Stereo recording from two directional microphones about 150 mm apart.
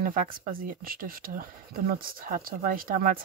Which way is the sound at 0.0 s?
70° right (ahead or behind).